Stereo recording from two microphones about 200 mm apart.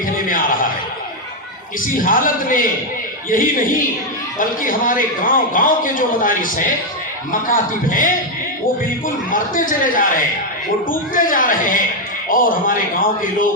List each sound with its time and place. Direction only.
0.3 s a sound: 40° left (ahead or behind)
1.8 s a man's voice: 45° left (ahead or behind)
9.3 s a man's voice: 45° left (ahead or behind)